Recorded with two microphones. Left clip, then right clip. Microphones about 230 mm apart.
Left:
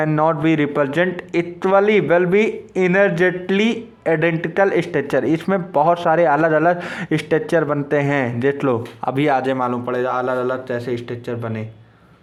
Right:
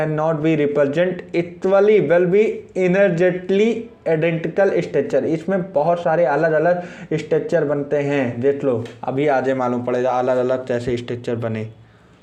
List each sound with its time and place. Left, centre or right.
0.1 s a man's voice: left; by 11.6 s centre